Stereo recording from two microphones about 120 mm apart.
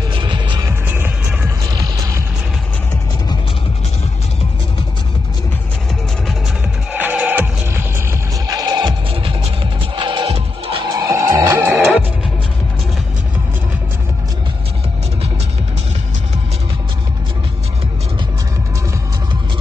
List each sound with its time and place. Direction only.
0.1 s music: 40° right (ahead or behind)
0.7 s music: 20° right (ahead or behind)
6.9 s music: 15° right (ahead or behind)
8.5 s music: 30° right (ahead or behind); by 10.8 s 50° right (ahead or behind)
11.0 s music: 25° right (ahead or behind)